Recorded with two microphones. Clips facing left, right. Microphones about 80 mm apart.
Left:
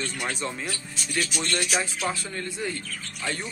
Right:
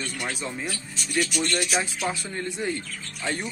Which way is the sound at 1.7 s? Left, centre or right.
Right.